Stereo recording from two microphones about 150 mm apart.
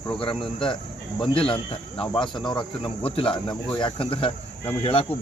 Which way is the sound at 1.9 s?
5° left (ahead or behind).